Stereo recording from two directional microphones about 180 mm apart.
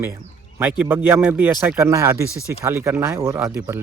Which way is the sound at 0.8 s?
10° right (ahead or behind).